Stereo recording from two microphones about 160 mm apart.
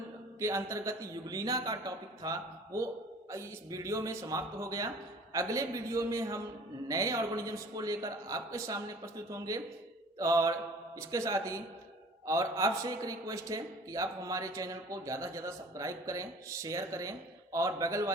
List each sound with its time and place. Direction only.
0.3 s a man's voice: 20° right (ahead or behind)